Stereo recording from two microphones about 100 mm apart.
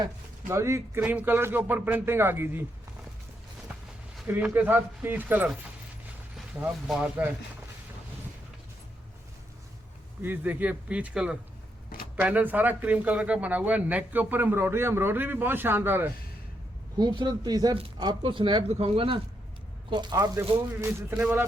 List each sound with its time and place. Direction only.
0.4 s speech: 30° right (ahead or behind)
1.0 s speech: 15° right (ahead or behind)
4.5 s speech: 20° right (ahead or behind)
6.6 s speech: 5° right (ahead or behind)
7.0 s speech: 15° right (ahead or behind)
10.2 s speech: 20° right (ahead or behind)
17.0 s speech: 50° right (ahead or behind)
18.0 s speech: 55° right (ahead or behind)
19.9 s speech: 45° right (ahead or behind)
20.8 s speech: 20° right (ahead or behind)